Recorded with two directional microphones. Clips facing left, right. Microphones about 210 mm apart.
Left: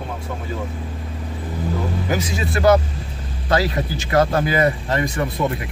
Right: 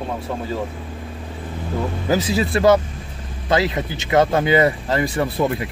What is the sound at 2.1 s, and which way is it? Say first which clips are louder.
Speech: right 8 dB; 30° right (ahead or behind).